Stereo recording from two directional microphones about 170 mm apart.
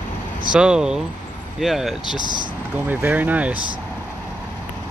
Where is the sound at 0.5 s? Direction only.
5° right (ahead or behind).